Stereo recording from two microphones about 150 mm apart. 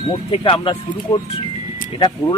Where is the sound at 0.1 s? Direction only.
35° left (ahead or behind).